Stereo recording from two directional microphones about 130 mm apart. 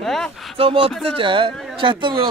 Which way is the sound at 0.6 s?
45° right (ahead or behind).